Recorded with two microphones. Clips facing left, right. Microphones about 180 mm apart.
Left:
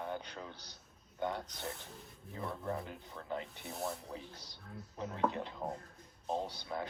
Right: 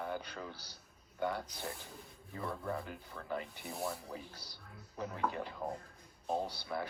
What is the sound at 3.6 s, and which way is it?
Speech, centre (ahead or behind).